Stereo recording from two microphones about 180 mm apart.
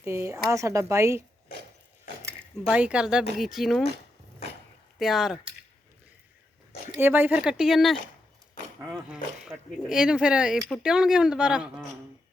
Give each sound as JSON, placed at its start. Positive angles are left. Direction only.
{"t": 0.0, "sound": "speech", "side_deg": -15}
{"t": 2.6, "sound": "speech", "side_deg": -5}
{"t": 4.9, "sound": "speech", "side_deg": 0}
{"t": 7.0, "sound": "speech", "side_deg": -10}